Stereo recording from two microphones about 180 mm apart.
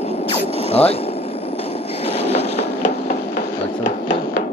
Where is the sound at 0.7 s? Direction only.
35° left (ahead or behind).